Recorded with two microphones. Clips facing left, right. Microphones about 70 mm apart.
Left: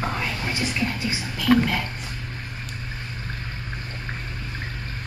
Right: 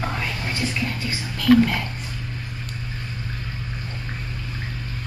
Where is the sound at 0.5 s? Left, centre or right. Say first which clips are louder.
Even; centre.